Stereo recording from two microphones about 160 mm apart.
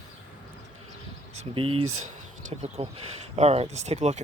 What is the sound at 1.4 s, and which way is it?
Speech, 35° right (ahead or behind).